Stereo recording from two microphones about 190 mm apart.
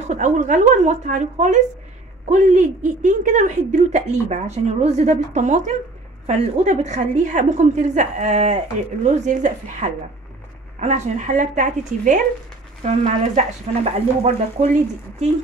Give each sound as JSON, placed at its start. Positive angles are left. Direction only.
{"t": 0.0, "sound": "a woman's voice", "side_deg": -40}